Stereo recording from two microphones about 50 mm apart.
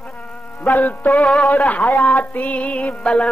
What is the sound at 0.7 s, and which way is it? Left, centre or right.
Music, left.